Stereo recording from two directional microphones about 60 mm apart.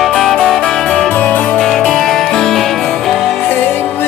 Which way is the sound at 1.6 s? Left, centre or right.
Centre.